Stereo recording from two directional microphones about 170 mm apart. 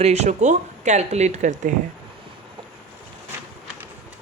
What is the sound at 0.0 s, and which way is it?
Speech, 40° right (ahead or behind).